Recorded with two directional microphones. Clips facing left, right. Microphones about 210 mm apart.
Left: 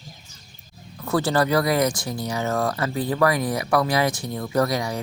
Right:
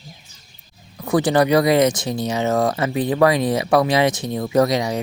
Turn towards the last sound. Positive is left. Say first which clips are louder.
# right 5 dB
turn(degrees=-20)  # may be behind; listen again after turning